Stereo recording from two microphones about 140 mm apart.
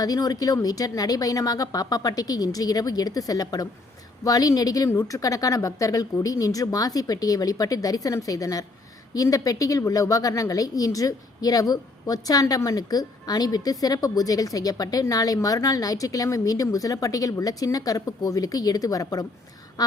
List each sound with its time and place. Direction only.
0.0 s a woman's voice: 30° left (ahead or behind)